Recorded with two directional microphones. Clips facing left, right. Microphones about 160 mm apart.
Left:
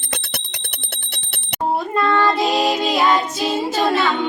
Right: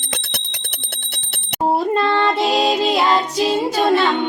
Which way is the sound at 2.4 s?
Centre (ahead or behind).